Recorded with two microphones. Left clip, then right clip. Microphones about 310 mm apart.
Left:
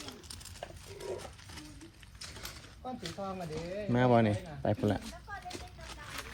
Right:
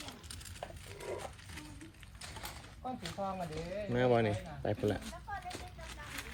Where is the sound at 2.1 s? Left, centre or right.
Right.